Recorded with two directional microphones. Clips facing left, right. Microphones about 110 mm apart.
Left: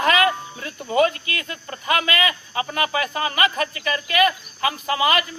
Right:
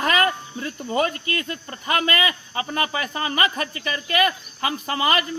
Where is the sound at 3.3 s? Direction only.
35° right (ahead or behind).